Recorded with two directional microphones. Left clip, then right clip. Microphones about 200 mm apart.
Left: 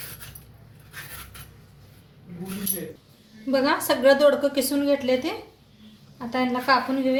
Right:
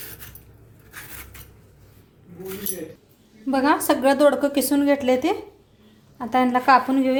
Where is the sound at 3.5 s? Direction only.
45° right (ahead or behind).